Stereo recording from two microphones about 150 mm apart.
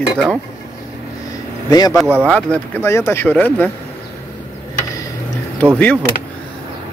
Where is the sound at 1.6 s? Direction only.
25° left (ahead or behind).